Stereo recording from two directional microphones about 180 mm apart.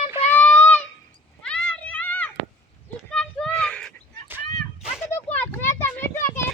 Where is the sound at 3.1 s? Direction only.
5° left (ahead or behind).